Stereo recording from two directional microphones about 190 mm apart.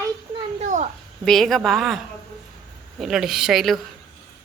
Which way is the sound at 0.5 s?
40° right (ahead or behind).